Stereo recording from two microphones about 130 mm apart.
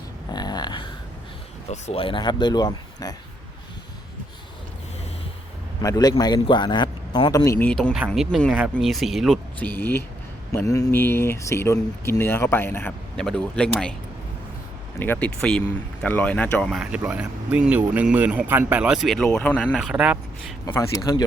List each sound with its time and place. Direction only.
0.3 s a sound: 30° left (ahead or behind)
1.7 s speech: 50° left (ahead or behind); by 3.2 s 30° left (ahead or behind)
5.8 s speech: 30° left (ahead or behind)
7.6 s speech: 5° left (ahead or behind)
7.9 s speech: 5° right (ahead or behind)
9.6 s speech: 15° left (ahead or behind)
13.1 s speech: 5° left (ahead or behind)
14.9 s speech: 15° left (ahead or behind)
16.7 s speech: 5° right (ahead or behind)
19.9 s speech: 10° right (ahead or behind)
20.7 s speech: 25° left (ahead or behind)